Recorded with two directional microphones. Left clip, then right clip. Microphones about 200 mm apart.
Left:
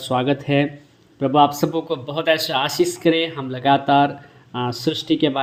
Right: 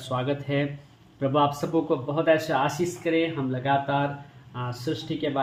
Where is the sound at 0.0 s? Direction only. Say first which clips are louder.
Left 8 dB; 40° left (ahead or behind).